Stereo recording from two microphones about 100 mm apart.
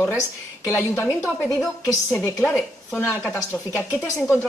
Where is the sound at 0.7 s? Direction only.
25° left (ahead or behind).